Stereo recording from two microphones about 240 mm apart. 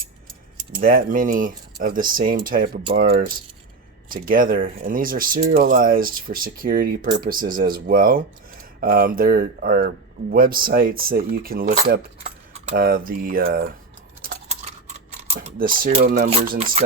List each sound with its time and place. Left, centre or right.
0.8 s speech: right
14.2 s a sound: right
16.3 s speech: right